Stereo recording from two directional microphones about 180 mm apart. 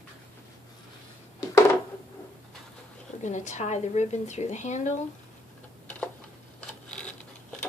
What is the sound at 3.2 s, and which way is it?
A woman's voice, 40° left (ahead or behind).